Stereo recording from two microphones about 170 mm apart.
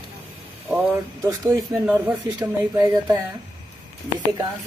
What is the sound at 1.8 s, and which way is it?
Speech, 10° right (ahead or behind).